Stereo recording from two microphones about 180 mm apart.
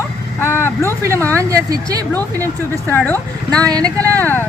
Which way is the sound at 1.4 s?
20° right (ahead or behind).